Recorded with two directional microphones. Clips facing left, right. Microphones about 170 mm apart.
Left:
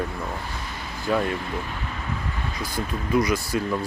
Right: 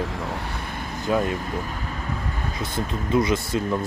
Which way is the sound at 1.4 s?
45° right (ahead or behind).